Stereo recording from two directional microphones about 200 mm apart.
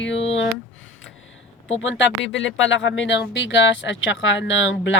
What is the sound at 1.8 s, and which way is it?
Speech, 65° left (ahead or behind).